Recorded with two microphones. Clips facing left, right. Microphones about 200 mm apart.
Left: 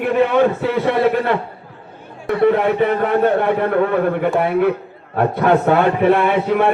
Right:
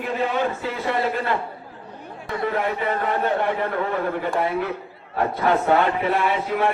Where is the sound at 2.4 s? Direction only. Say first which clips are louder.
Left 10 dB; 65° left (ahead or behind).